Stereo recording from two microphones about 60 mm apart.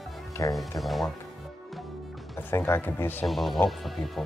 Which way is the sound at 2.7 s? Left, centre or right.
Left.